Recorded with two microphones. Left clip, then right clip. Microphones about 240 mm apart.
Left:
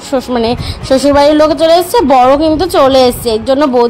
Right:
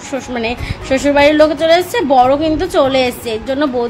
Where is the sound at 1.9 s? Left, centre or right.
Left.